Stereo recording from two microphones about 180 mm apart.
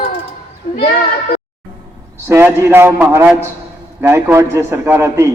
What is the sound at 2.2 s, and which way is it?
A man's voice, 15° right (ahead or behind).